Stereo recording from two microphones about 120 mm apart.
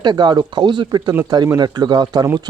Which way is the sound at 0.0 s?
35° right (ahead or behind).